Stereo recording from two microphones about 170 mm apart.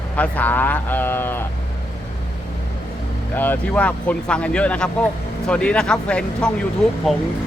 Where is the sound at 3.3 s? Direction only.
10° left (ahead or behind).